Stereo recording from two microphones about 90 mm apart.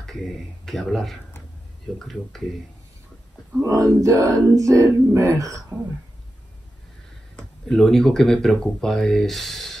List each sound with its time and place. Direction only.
0.0 s speech: 5° left (ahead or behind)
3.6 s music: 35° right (ahead or behind)
7.3 s speech: 10° left (ahead or behind)